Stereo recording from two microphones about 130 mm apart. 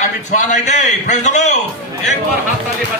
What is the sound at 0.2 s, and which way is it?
A man's voice, 65° left (ahead or behind).